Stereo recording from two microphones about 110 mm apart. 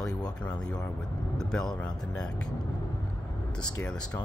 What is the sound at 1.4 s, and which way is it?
Speech, 5° left (ahead or behind).